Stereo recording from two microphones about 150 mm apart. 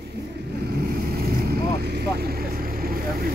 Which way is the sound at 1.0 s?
90° right.